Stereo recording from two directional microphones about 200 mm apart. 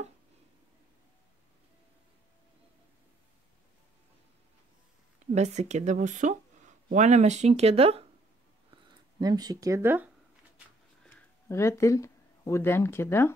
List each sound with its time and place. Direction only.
5.2 s speech: 35° right (ahead or behind)
9.2 s speech: 20° right (ahead or behind)
11.1 s speech: 10° left (ahead or behind)